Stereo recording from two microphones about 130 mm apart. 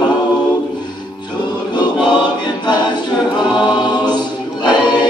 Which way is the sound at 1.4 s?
35° left (ahead or behind).